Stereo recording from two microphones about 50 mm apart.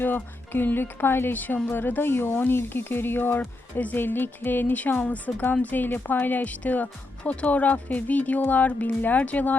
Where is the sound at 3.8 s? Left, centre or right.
Left.